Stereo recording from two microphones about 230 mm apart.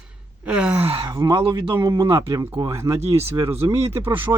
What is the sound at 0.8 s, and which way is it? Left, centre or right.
Speech, right.